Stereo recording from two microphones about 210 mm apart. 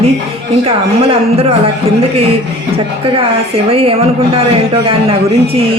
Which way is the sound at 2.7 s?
25° right (ahead or behind).